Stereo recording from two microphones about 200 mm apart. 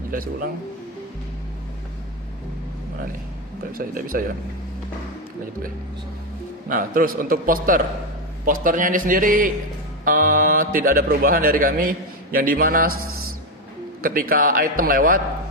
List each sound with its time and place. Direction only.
0.1 s speech: 45° right (ahead or behind)
3.7 s speech: 45° right (ahead or behind)
6.7 s speech: 45° right (ahead or behind)
14.0 s speech: 45° right (ahead or behind)